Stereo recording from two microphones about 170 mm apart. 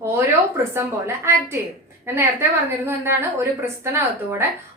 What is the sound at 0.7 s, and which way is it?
A woman's voice, 15° right (ahead or behind).